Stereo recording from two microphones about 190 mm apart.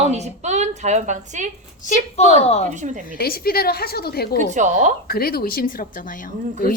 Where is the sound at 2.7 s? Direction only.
40° right (ahead or behind).